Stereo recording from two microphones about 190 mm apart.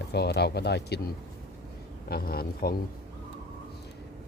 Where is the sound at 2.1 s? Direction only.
55° left (ahead or behind).